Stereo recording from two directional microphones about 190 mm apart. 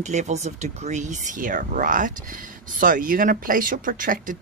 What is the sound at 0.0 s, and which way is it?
Speech, 40° right (ahead or behind).